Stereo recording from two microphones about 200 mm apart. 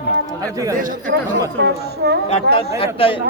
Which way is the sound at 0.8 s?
40° right (ahead or behind).